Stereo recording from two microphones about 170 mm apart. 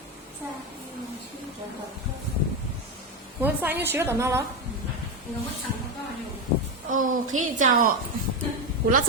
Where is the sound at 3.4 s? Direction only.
10° right (ahead or behind).